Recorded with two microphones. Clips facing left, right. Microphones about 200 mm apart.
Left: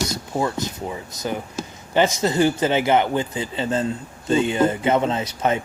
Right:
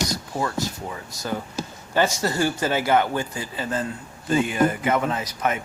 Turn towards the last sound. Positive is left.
turn(degrees=30)  # may be behind; listen again after turning